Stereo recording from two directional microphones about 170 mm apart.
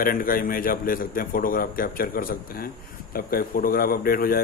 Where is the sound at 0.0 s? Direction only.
60° left (ahead or behind).